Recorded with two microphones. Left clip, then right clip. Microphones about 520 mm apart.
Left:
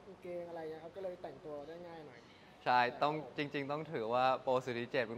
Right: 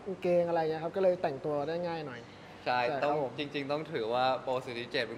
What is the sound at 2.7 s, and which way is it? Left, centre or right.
Speech, left.